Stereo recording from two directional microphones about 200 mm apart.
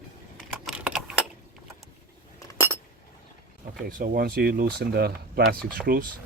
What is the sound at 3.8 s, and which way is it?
Speech, 45° right (ahead or behind).